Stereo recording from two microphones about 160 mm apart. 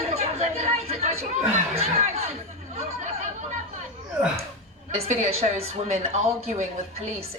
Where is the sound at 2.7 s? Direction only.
40° right (ahead or behind).